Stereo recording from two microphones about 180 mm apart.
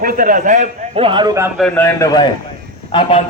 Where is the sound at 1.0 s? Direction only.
25° right (ahead or behind).